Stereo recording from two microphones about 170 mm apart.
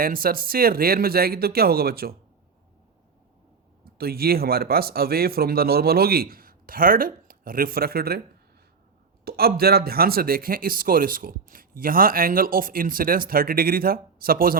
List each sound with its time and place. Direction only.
0.0 s speech: 60° right (ahead or behind)
3.8 s speech: 65° right (ahead or behind)
9.2 s speech: 65° right (ahead or behind)